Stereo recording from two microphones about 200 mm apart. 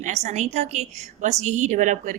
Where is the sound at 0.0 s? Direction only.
35° right (ahead or behind).